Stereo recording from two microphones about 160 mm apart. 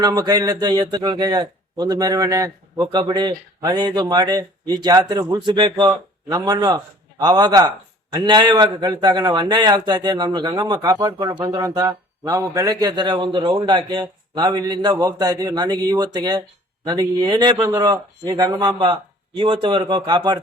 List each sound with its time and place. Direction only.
0.0 s a man's voice: 25° right (ahead or behind)